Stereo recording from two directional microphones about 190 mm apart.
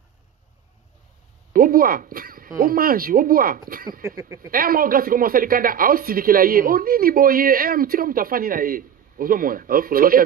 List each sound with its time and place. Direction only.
1.5 s speech: 50° right (ahead or behind)
4.0 s a sound: 15° right (ahead or behind)
4.5 s speech: 50° right (ahead or behind)